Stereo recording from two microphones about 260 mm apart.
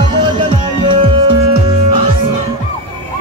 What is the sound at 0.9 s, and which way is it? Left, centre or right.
Music, centre.